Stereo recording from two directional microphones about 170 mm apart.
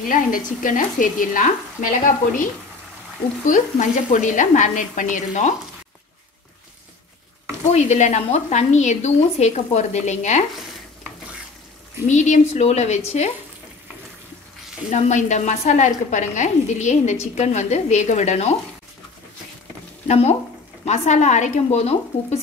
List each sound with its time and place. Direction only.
0.1 s a woman's voice: 50° left (ahead or behind)
3.4 s a woman's voice: 50° left (ahead or behind)
7.6 s a woman's voice: 40° left (ahead or behind)
12.1 s a woman's voice: 45° left (ahead or behind)
14.9 s a woman's voice: 40° left (ahead or behind)
20.1 s speech: 40° left (ahead or behind)